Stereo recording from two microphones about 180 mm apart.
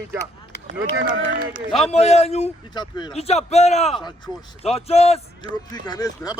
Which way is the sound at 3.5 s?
35° left (ahead or behind).